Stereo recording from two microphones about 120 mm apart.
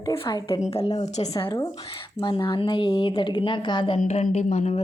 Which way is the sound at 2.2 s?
40° left (ahead or behind).